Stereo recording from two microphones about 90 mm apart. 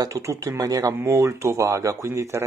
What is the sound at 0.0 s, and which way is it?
Speech, 40° right (ahead or behind).